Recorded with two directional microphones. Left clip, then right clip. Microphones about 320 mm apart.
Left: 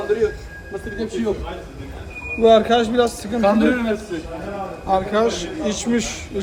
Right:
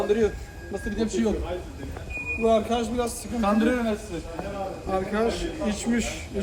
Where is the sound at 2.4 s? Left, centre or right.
Left.